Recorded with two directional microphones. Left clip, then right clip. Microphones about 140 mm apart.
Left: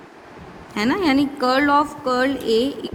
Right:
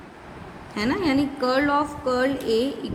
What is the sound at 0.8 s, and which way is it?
Speech, 75° left (ahead or behind).